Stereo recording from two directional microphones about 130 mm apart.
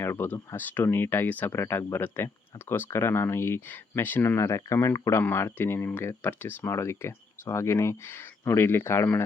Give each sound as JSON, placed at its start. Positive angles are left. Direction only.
{"t": 0.0, "sound": "speech", "side_deg": 20}